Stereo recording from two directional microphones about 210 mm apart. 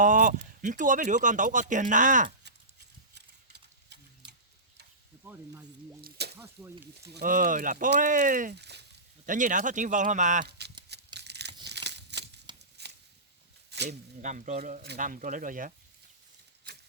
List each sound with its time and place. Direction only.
0.0 s speech: 35° right (ahead or behind)
3.2 s horse: 55° right (ahead or behind)
5.2 s speech: 10° right (ahead or behind)
6.0 s speech: 50° right (ahead or behind)
6.4 s speech: 10° right (ahead or behind)
7.1 s speech: 45° right (ahead or behind)
9.2 s speech: 40° right (ahead or behind)
10.8 s scissors: 55° right (ahead or behind)
12.5 s a sound: 20° right (ahead or behind)
13.7 s a sound: 55° right (ahead or behind)
14.2 s speech: 35° right (ahead or behind)